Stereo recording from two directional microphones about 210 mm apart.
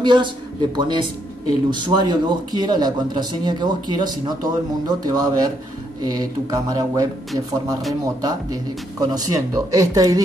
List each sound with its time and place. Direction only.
0.0 s a man's voice: 20° right (ahead or behind)
8.2 s speech: 15° right (ahead or behind)